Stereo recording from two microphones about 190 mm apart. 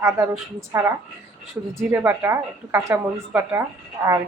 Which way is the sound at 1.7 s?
10° right (ahead or behind).